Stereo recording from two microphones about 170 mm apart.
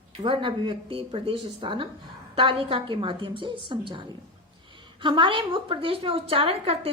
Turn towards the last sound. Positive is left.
turn(degrees=-35)  # may be behind; listen again after turning